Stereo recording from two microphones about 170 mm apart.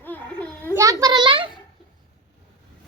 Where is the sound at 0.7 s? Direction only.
20° right (ahead or behind).